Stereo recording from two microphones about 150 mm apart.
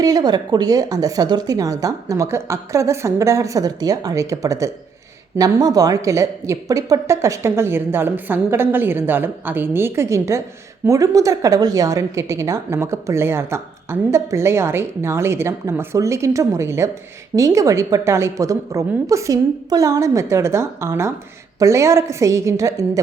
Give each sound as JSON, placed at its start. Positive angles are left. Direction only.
{"t": 0.0, "sound": "a woman's voice", "side_deg": -25}